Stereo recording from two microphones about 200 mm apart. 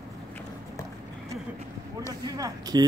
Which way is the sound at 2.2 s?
20° right (ahead or behind).